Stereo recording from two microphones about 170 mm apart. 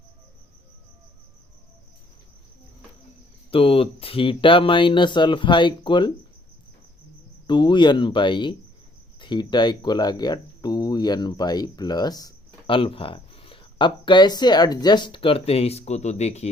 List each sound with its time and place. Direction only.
3.5 s speech: 35° left (ahead or behind)
7.4 s speech: 25° left (ahead or behind)